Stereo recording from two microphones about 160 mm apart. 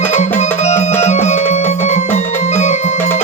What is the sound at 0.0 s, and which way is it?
Music, 45° left (ahead or behind).